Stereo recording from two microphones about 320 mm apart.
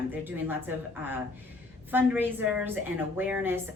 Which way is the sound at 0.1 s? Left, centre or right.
Centre.